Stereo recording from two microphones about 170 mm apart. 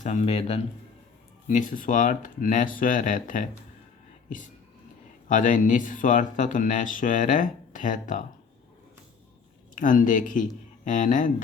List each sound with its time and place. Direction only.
0.0 s speech: 45° left (ahead or behind)
1.5 s speech: 50° left (ahead or behind)
5.3 s speech: 50° left (ahead or behind)
9.7 s speech: 50° left (ahead or behind)